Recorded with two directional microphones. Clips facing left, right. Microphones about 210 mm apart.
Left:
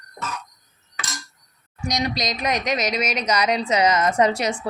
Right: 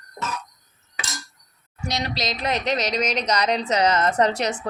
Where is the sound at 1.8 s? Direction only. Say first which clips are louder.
Left 2 dB; 15° left (ahead or behind).